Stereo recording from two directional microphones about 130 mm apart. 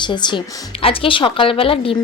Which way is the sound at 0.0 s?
35° left (ahead or behind).